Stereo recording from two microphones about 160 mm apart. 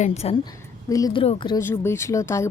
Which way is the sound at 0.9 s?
20° left (ahead or behind).